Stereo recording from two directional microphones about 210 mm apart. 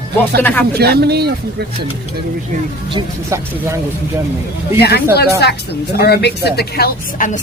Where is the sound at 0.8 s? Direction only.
50° right (ahead or behind).